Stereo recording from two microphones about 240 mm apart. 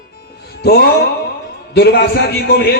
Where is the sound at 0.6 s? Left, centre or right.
Left.